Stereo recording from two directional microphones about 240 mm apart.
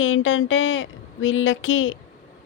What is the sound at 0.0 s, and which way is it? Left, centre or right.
Speech, left.